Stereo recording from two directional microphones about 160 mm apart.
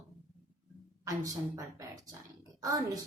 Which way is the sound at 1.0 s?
20° right (ahead or behind).